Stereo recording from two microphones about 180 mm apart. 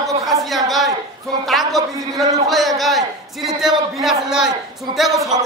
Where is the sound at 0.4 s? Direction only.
Centre (ahead or behind).